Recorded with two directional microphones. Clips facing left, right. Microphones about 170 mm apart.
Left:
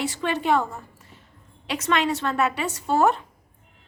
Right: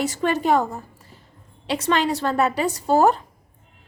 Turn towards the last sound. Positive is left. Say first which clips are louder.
# right 3 dB
turn(degrees=-35)  # may be behind; listen again after turning